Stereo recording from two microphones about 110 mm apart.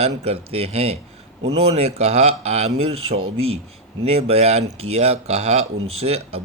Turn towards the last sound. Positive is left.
turn(degrees=-70)  # may be behind; listen again after turning